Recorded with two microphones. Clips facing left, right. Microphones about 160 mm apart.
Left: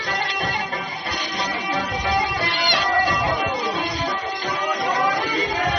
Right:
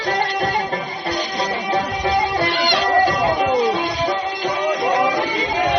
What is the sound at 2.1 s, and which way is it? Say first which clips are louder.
Music: right 5 dB; 25° right (ahead or behind).